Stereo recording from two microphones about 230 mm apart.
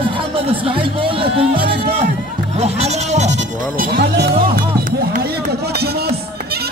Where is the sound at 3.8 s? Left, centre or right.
Right.